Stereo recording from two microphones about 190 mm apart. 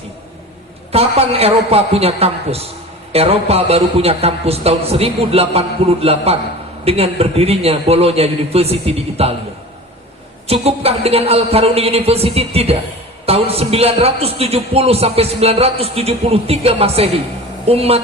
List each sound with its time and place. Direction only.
0.9 s a man's voice: 30° right (ahead or behind)
10.5 s a man's voice: 30° right (ahead or behind)